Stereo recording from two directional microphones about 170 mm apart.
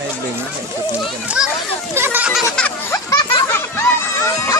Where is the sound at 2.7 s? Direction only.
20° left (ahead or behind).